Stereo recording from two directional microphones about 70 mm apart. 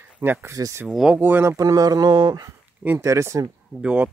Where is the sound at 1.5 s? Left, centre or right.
Right.